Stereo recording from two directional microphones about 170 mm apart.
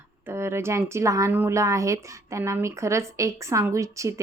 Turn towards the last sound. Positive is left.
turn(degrees=-20)  # may be behind; listen again after turning